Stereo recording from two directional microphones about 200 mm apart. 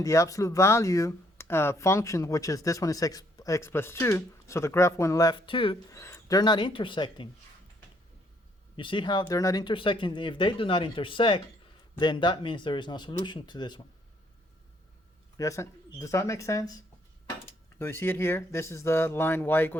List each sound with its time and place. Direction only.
0.0 s speech: 15° left (ahead or behind)
6.0 s speech: 15° left (ahead or behind)
8.7 s speech: 25° left (ahead or behind)
15.4 s speech: 15° left (ahead or behind)